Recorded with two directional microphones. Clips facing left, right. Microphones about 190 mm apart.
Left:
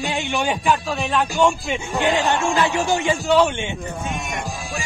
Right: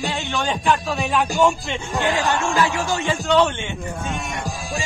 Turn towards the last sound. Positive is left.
turn(degrees=15)  # may be behind; listen again after turning